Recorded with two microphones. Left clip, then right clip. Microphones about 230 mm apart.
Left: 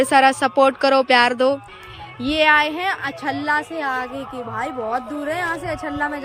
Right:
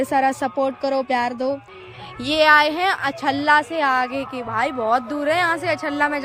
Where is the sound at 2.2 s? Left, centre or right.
Right; by 5.7 s centre.